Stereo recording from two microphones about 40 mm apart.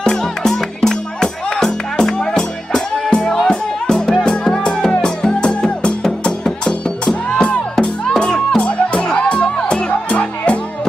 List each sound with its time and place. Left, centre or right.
0.0 s music: centre
8.0 s music: centre